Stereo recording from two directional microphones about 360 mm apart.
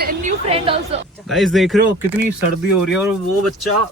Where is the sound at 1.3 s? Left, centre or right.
Centre.